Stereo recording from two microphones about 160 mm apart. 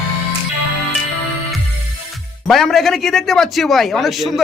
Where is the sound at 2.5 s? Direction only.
Centre (ahead or behind).